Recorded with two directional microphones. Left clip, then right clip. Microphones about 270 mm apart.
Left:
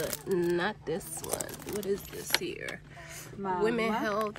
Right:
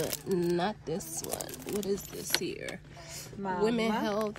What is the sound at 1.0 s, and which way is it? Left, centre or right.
Speech, centre.